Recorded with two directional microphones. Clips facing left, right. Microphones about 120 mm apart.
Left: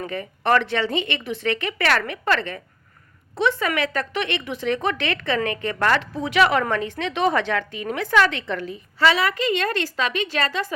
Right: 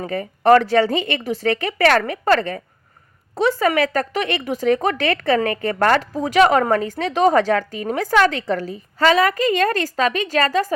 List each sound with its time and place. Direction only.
0.0 s a woman's voice: 40° right (ahead or behind)